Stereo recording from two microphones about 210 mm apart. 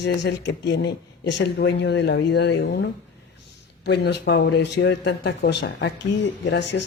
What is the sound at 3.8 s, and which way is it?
Speech, 55° left (ahead or behind).